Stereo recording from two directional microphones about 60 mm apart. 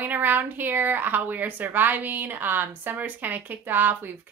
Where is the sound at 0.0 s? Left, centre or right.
Right.